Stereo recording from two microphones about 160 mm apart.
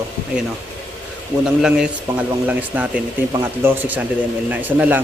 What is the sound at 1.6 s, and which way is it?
Speech, 5° right (ahead or behind).